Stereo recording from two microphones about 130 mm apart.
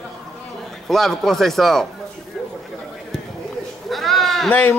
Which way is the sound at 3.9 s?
Centre (ahead or behind).